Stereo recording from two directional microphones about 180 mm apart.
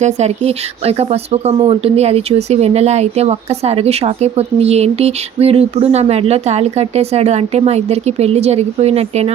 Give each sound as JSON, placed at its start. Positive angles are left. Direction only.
{"t": 0.0, "sound": "speech", "side_deg": -35}